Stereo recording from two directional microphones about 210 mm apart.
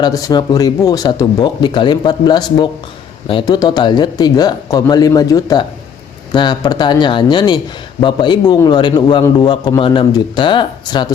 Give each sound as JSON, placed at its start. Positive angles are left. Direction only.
{"t": 0.0, "sound": "a man's voice", "side_deg": 20}